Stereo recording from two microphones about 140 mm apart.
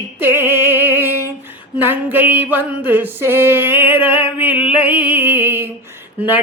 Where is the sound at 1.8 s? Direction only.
15° right (ahead or behind).